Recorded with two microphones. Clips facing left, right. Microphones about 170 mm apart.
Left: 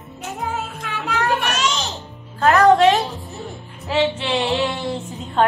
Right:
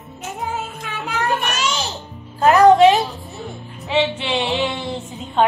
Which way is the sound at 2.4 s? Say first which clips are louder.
Right 3 dB; 20° right (ahead or behind).